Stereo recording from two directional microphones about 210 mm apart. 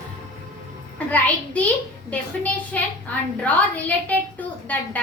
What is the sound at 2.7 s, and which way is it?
A woman's voice, 5° left (ahead or behind).